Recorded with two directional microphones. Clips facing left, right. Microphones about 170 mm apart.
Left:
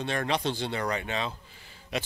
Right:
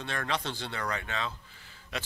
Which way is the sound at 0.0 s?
15° left (ahead or behind).